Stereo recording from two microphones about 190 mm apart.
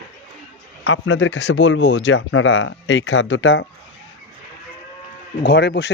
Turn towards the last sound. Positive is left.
turn(degrees=60)  # may be behind; listen again after turning